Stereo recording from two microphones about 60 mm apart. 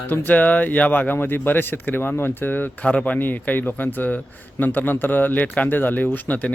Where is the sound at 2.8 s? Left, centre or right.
Left.